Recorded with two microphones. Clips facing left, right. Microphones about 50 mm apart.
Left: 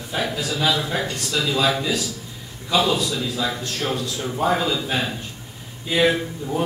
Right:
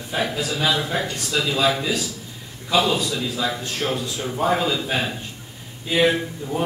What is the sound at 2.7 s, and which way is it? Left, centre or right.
Speech, centre.